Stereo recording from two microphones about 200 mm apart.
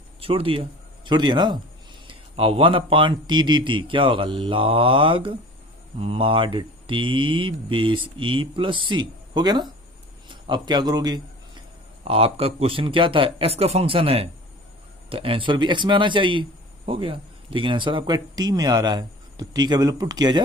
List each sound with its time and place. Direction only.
0.2 s speech: 25° right (ahead or behind)